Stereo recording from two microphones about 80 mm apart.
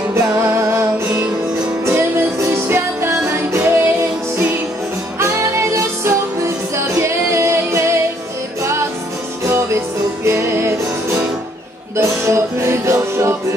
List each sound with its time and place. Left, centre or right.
0.1 s music: right
5.2 s music: right
9.5 s music: right